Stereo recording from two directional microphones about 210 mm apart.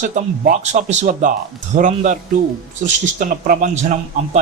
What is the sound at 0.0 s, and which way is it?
Speech, 35° right (ahead or behind).